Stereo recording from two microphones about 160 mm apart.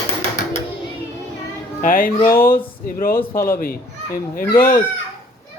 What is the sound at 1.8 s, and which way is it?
Speech, 60° left (ahead or behind).